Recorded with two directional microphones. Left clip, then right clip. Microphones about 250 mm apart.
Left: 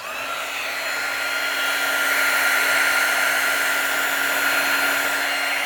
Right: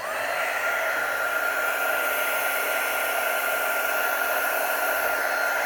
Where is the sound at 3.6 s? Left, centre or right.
Left.